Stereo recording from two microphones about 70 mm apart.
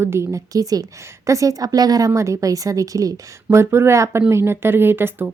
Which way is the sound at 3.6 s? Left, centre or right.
Right.